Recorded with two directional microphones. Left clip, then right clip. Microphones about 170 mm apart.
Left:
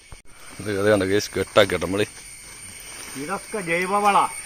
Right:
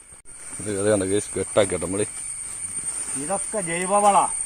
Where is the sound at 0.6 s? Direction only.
Centre (ahead or behind).